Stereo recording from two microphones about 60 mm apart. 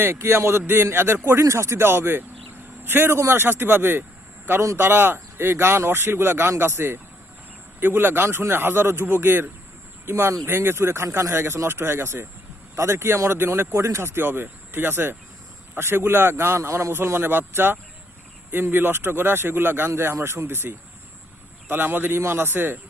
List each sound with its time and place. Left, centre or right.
0.2 s speech: right
1.4 s speech: right
19.9 s speech: right